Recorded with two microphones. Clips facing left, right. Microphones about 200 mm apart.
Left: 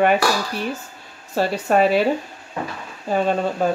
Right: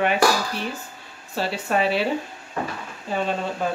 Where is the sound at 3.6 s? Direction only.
40° left (ahead or behind).